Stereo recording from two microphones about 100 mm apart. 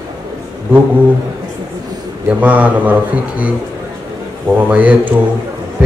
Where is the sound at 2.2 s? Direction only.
15° right (ahead or behind).